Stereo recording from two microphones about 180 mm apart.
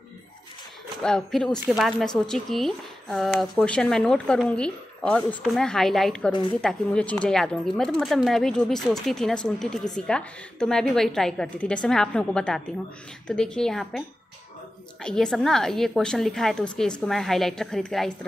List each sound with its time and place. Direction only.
1.0 s a woman's voice: 5° left (ahead or behind)